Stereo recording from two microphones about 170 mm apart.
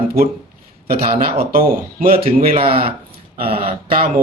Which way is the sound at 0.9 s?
65° right (ahead or behind).